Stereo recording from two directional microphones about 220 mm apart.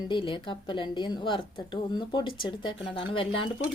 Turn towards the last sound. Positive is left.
turn(degrees=25)  # may be behind; listen again after turning